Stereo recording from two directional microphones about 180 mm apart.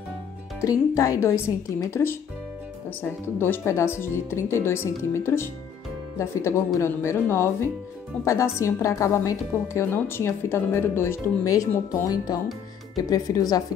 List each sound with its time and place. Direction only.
0.6 s a woman's voice: 20° left (ahead or behind)